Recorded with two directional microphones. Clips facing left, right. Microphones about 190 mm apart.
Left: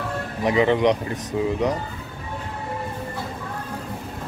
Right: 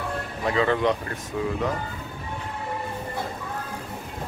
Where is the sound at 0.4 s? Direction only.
20° left (ahead or behind).